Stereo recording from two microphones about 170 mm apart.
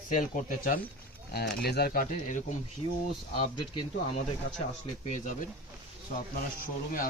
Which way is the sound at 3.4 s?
30° left (ahead or behind).